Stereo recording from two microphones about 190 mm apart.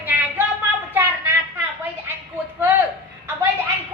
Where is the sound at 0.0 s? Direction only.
10° right (ahead or behind).